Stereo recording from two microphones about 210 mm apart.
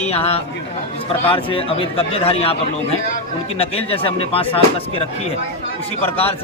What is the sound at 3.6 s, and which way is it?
Speech, 25° left (ahead or behind).